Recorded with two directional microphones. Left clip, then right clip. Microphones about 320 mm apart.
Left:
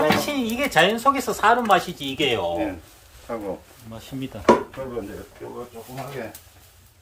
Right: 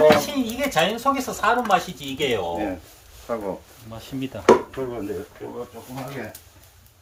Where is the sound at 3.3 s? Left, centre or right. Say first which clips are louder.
Right 3 dB; right.